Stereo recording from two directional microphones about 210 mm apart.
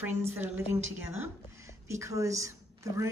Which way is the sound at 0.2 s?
10° right (ahead or behind).